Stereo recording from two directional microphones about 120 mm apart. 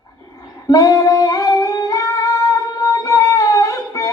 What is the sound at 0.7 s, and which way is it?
Music, 30° left (ahead or behind).